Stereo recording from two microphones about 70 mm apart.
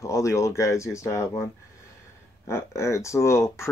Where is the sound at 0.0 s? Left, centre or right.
Left.